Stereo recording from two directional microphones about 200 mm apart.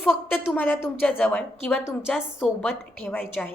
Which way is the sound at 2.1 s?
Centre (ahead or behind).